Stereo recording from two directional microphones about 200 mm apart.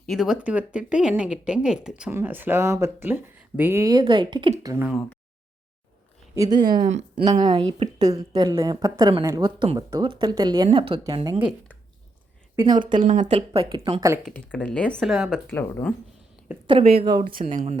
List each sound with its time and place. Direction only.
0.0 s speech: centre (ahead or behind); by 4.9 s 15° right (ahead or behind)
4.9 s speech: 5° left (ahead or behind)
6.3 s speech: 20° right (ahead or behind)
12.5 s speech: 20° right (ahead or behind)
13.0 s speech: 35° right (ahead or behind); by 14.2 s 15° right (ahead or behind)
14.3 s speech: 5° left (ahead or behind)
15.4 s speech: 10° left (ahead or behind)
16.5 s a woman's voice: 5° right (ahead or behind)
17.0 s speech: 25° right (ahead or behind)
17.4 s speech: 35° right (ahead or behind)